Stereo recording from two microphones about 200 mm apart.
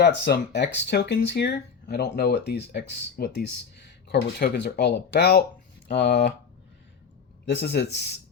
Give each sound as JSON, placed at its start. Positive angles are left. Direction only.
{"t": 0.0, "sound": "speech", "side_deg": 55}
{"t": 7.4, "sound": "speech", "side_deg": 60}